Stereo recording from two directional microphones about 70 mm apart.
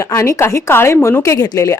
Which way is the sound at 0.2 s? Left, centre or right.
Left.